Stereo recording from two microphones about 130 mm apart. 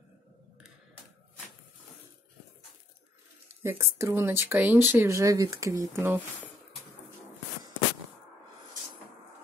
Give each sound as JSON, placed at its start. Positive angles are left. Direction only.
{"t": 3.6, "sound": "speech", "side_deg": -20}